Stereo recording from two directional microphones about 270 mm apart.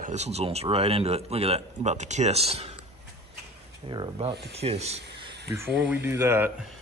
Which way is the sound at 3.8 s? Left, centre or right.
Centre.